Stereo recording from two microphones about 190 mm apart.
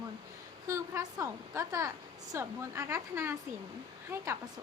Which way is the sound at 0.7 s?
15° right (ahead or behind).